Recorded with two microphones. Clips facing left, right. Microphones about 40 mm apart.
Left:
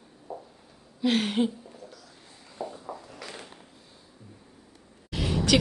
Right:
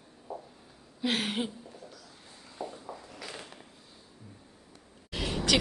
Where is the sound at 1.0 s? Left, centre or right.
Centre.